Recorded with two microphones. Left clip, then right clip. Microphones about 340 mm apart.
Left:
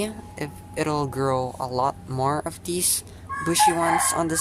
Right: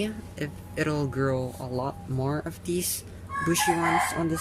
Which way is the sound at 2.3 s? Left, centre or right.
Centre.